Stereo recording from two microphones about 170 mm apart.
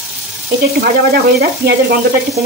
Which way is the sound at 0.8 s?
60° right (ahead or behind).